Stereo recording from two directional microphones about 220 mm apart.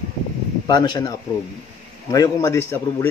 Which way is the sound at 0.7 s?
20° left (ahead or behind).